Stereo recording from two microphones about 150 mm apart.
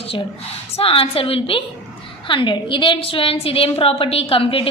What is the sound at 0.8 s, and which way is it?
A woman's voice, 40° left (ahead or behind).